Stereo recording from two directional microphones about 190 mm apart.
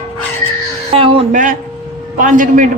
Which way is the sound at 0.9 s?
30° right (ahead or behind).